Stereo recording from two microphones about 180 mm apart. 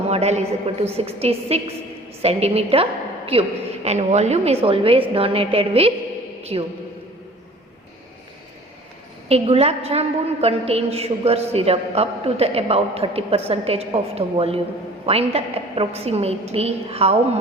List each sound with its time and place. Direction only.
0.1 s a man's voice: 35° right (ahead or behind)
9.3 s a man's voice: 35° right (ahead or behind)